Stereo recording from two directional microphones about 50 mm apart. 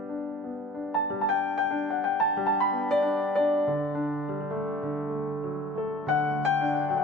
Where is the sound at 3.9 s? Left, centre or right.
Centre.